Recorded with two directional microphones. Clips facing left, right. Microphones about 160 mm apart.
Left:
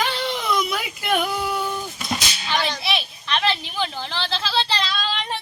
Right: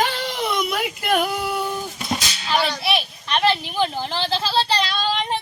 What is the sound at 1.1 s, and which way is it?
Female singing, 10° right (ahead or behind).